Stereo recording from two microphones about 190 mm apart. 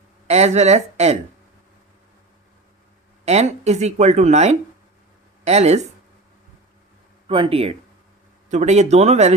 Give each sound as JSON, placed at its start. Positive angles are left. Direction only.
{"t": 0.3, "sound": "speech", "side_deg": -35}
{"t": 3.2, "sound": "speech", "side_deg": -35}
{"t": 7.3, "sound": "speech", "side_deg": -30}